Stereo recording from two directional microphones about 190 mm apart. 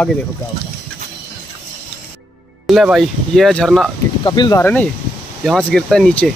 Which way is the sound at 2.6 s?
Centre (ahead or behind).